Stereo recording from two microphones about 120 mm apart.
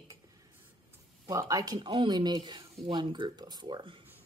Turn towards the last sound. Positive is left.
turn(degrees=-45)  # may be behind; listen again after turning